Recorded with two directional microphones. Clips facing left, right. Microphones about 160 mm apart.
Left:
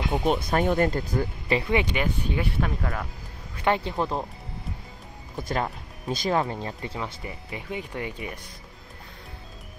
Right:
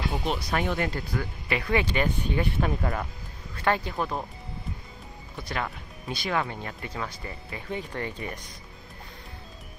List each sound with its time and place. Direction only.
0.2 s speech: 45° left (ahead or behind)
1.5 s speech: 20° left (ahead or behind); by 3.1 s 10° right (ahead or behind)
3.6 s speech: 20° left (ahead or behind)
5.4 s speech: 40° left (ahead or behind)
6.4 s speech: 30° left (ahead or behind)
7.2 s speech: 10° left (ahead or behind)